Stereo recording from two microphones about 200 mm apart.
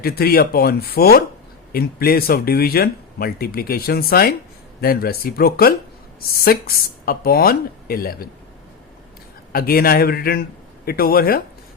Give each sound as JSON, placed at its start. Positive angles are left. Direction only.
{"t": 0.0, "sound": "speech", "side_deg": 50}
{"t": 9.5, "sound": "speech", "side_deg": 50}